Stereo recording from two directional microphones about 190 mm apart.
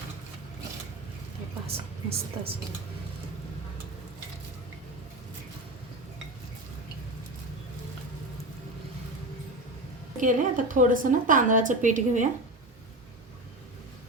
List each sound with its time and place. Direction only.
1.6 s a woman's voice: 30° right (ahead or behind)
10.2 s a woman's voice: 45° right (ahead or behind)